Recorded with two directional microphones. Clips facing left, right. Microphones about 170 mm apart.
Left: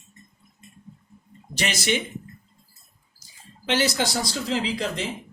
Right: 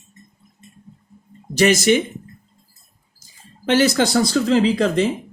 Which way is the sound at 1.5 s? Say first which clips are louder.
Right 11 dB; 45° right (ahead or behind).